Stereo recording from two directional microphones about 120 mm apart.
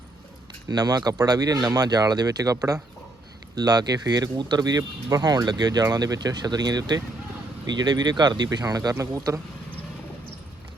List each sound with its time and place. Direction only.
0.7 s speech: 35° right (ahead or behind)